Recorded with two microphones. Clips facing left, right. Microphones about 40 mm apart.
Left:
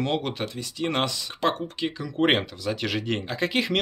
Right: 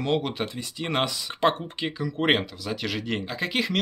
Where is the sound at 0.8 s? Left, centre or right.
Centre.